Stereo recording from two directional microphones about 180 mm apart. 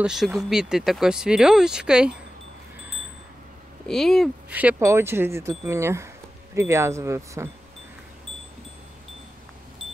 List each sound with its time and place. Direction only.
0.0 s speech: 5° right (ahead or behind)
3.8 s speech: 5° left (ahead or behind)
4.6 s speech: 10° right (ahead or behind)